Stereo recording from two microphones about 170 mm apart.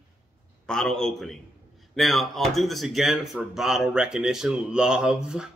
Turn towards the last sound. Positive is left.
turn(degrees=-5)  # may be behind; listen again after turning